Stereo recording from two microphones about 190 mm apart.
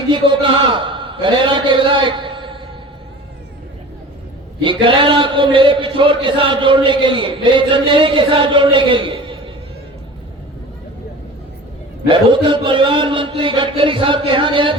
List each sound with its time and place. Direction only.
0.1 s a man's voice: 25° right (ahead or behind)
4.6 s a man's voice: 25° right (ahead or behind)
12.0 s a man's voice: 25° right (ahead or behind)